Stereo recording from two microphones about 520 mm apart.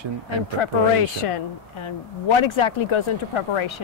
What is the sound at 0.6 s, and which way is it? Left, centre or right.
A woman's voice, left.